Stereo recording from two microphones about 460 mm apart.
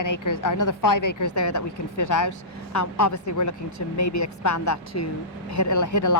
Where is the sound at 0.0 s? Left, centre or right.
Left.